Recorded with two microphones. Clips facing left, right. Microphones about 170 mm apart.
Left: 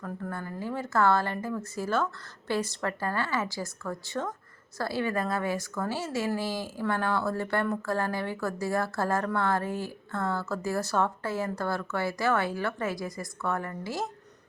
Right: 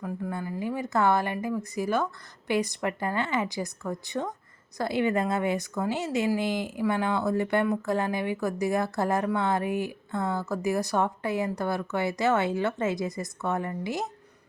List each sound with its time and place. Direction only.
0.0 s speech: 15° right (ahead or behind)